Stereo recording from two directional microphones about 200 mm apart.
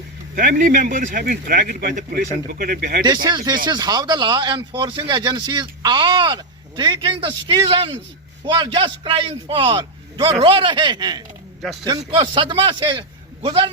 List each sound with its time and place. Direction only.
0.3 s a man's voice: 45° right (ahead or behind)
3.0 s speech: 20° right (ahead or behind)
11.6 s speech: centre (ahead or behind)
11.9 s speech: 25° right (ahead or behind)